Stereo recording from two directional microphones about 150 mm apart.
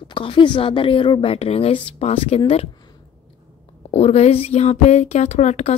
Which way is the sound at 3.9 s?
45° left (ahead or behind).